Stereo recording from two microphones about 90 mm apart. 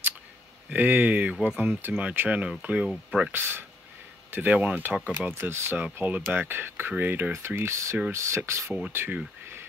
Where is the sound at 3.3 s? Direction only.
25° right (ahead or behind).